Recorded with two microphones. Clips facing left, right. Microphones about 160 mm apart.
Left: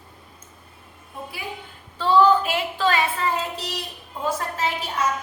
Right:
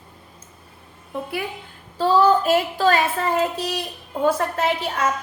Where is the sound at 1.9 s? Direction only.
40° right (ahead or behind).